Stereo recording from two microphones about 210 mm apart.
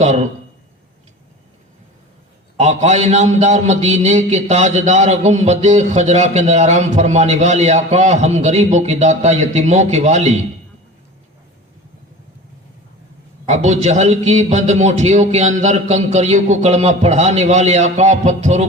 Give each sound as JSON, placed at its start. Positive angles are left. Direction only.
{"t": 0.0, "sound": "a man's voice", "side_deg": -35}
{"t": 2.6, "sound": "a man's voice", "side_deg": -35}
{"t": 13.4, "sound": "a man's voice", "side_deg": -35}